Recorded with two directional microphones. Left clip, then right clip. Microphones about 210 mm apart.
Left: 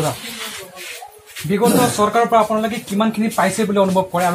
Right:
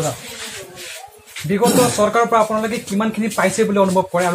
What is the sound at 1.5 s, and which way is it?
Speech, 30° right (ahead or behind).